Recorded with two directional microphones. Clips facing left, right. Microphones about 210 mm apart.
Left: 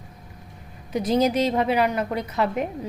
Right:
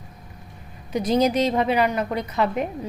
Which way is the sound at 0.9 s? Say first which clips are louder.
Right 1 dB; 5° left (ahead or behind).